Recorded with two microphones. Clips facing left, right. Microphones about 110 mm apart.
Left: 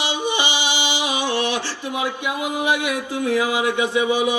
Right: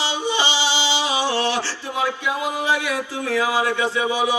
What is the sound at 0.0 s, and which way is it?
Music, 15° left (ahead or behind).